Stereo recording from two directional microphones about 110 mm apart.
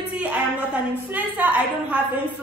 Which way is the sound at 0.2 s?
10° right (ahead or behind).